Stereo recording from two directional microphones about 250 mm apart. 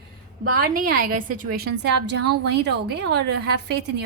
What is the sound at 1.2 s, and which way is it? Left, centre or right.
A woman's voice, right.